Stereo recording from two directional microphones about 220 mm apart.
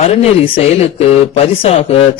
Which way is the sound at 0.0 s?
30° left (ahead or behind).